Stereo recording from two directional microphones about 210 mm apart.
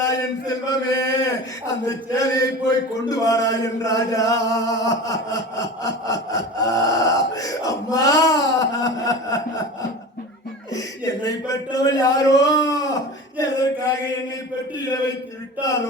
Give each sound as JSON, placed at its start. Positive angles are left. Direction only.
{"t": 0.0, "sound": "a man's voice", "side_deg": 15}
{"t": 5.8, "sound": "a sound", "side_deg": 15}
{"t": 10.7, "sound": "a man's voice", "side_deg": 15}